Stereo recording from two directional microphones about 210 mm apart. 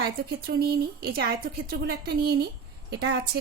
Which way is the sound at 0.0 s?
50° right (ahead or behind).